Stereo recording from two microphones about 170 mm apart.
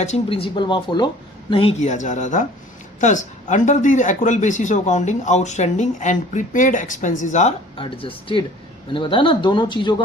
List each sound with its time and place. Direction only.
0.0 s speech: 35° left (ahead or behind)
1.8 s speech: 45° left (ahead or behind)
7.8 s speech: 30° left (ahead or behind)